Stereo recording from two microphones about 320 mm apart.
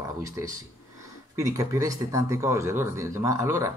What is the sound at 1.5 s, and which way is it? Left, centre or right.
Speech, centre.